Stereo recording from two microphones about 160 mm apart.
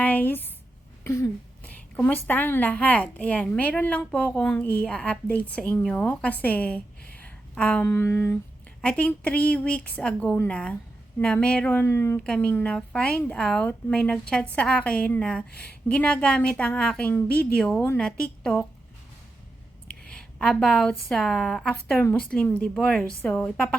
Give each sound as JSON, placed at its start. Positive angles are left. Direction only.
{"t": 0.0, "sound": "a sound", "side_deg": 10}
{"t": 2.0, "sound": "a woman's voice", "side_deg": 10}
{"t": 20.1, "sound": "a woman's voice", "side_deg": 5}